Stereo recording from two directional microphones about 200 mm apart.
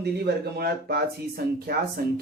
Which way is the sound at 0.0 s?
55° right (ahead or behind).